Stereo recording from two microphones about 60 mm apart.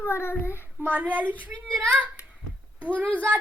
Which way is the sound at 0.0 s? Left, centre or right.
Left.